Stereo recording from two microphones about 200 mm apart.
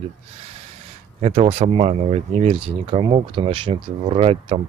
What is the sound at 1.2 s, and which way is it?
Speech, 30° right (ahead or behind).